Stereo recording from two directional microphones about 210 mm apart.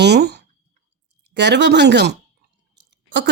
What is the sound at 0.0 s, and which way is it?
Speech, 50° right (ahead or behind).